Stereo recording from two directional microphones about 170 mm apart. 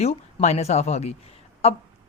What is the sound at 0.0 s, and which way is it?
Speech, 40° left (ahead or behind).